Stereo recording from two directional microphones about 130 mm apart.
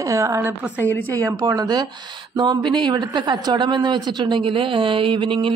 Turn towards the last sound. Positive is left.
turn(degrees=-40)  # may be behind; listen again after turning